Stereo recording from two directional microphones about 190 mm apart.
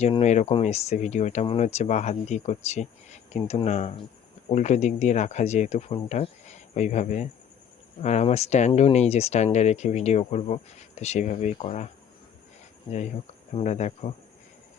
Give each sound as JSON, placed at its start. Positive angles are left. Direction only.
{"t": 0.2, "sound": "speech", "side_deg": 35}
{"t": 12.9, "sound": "speech", "side_deg": 35}